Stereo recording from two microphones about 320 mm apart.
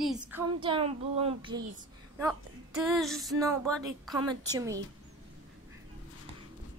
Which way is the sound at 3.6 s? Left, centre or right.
Centre.